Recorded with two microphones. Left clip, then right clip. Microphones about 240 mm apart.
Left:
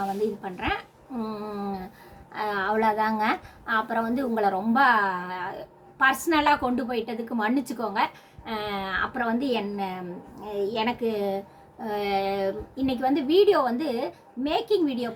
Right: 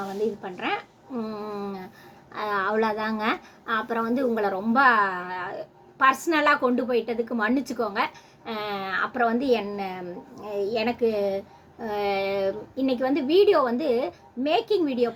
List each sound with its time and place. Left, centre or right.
0.4 s a woman's voice: centre
1.2 s a sound: centre
2.3 s a woman's voice: centre